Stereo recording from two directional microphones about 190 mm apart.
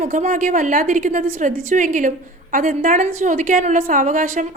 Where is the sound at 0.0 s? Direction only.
40° right (ahead or behind).